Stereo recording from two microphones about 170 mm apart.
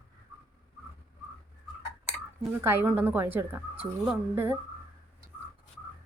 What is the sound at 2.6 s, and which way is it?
A woman's voice, 10° right (ahead or behind).